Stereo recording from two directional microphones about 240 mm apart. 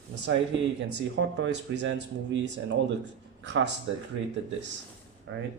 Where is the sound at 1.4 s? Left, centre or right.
Right.